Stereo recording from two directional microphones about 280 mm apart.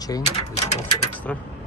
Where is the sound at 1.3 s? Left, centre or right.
Centre.